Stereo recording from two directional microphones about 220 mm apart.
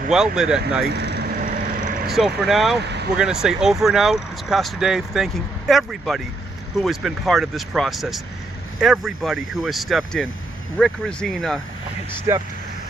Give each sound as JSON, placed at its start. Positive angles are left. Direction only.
{"t": 0.3, "sound": "speech", "side_deg": 0}
{"t": 0.9, "sound": "vehicle", "side_deg": -50}
{"t": 2.0, "sound": "speech", "side_deg": 0}
{"t": 2.8, "sound": "vehicle", "side_deg": -50}
{"t": 3.2, "sound": "speech", "side_deg": -5}
{"t": 12.3, "sound": "speech", "side_deg": -10}